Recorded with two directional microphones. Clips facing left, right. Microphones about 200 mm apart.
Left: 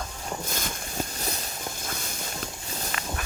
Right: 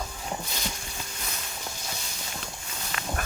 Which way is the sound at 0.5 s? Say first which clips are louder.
Left 4 dB; 45° left (ahead or behind).